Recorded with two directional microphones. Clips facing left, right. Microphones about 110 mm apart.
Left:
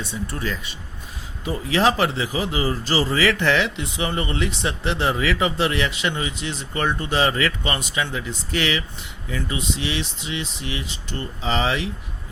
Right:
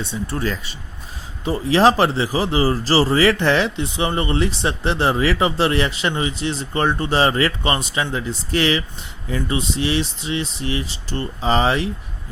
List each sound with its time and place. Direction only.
0.0 s speech: 25° right (ahead or behind)